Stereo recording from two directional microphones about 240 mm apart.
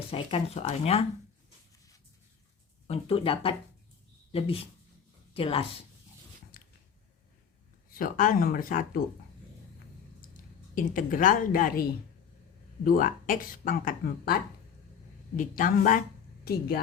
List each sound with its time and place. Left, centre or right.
0.1 s speech: left
2.8 s speech: left
6.5 s a sound: left
7.9 s speech: left
10.8 s speech: left
15.4 s a woman's voice: left